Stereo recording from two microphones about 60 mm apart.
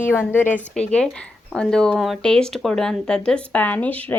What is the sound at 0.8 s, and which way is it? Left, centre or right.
Speech, centre.